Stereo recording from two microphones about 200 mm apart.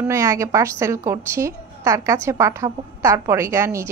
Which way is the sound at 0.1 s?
15° right (ahead or behind).